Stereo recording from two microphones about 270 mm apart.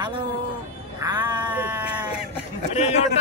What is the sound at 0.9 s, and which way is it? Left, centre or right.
Sheep, centre.